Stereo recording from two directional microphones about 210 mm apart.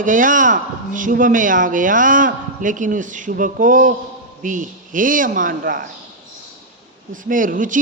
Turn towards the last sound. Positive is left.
turn(degrees=-40)  # may be behind; listen again after turning